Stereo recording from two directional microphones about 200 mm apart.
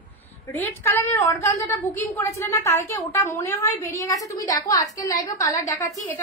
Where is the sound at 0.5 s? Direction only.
15° left (ahead or behind).